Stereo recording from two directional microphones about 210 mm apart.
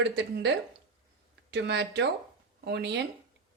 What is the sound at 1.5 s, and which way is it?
A woman's voice, 55° right (ahead or behind).